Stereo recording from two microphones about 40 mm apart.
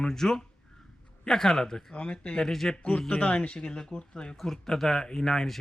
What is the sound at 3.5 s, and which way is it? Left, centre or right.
Speech, left.